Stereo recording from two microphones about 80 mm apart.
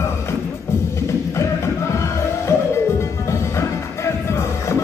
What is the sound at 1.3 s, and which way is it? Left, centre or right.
Music, left.